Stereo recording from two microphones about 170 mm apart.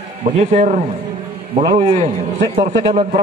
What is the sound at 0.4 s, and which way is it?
Speech, 40° right (ahead or behind).